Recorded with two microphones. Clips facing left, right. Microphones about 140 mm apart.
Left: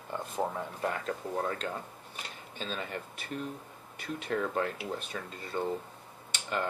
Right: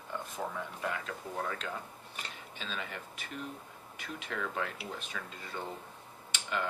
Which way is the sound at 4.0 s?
40° left (ahead or behind).